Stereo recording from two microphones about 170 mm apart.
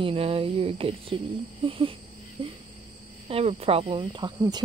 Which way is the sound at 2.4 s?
35° right (ahead or behind).